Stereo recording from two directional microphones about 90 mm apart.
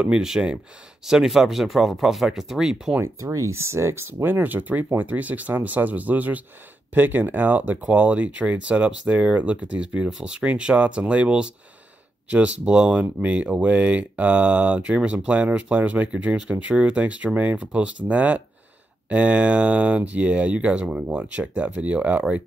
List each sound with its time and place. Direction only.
0.0 s speech: 10° right (ahead or behind)
3.2 s speech: 35° right (ahead or behind); by 22.2 s 15° right (ahead or behind)